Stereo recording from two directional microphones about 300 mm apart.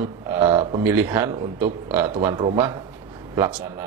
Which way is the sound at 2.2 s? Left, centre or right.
Right.